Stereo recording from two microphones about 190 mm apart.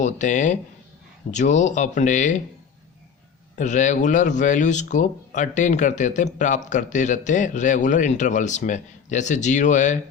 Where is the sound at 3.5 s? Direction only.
40° left (ahead or behind).